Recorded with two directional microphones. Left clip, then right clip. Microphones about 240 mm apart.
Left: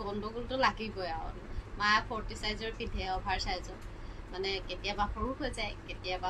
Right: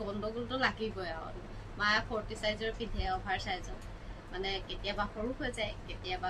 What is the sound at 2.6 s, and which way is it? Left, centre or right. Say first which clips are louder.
Speech: right 1 dB; centre.